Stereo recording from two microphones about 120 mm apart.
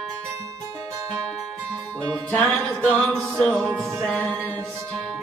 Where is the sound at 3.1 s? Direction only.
5° left (ahead or behind).